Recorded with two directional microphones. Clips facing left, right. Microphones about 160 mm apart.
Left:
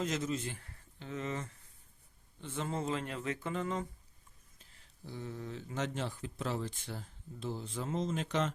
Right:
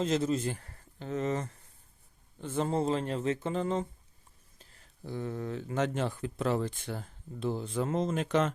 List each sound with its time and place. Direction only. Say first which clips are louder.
0.0 s speech: right 7 dB; 30° right (ahead or behind)
4.5 s speech: right 5 dB; 50° right (ahead or behind)